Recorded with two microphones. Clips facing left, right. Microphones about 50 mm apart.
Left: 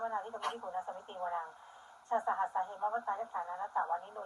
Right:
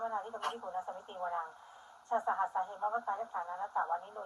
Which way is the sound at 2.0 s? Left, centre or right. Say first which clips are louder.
Even; left.